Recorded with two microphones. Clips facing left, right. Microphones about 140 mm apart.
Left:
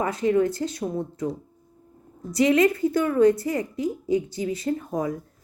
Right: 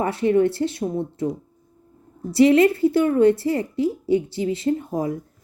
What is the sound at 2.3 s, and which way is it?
A woman's voice, 30° right (ahead or behind).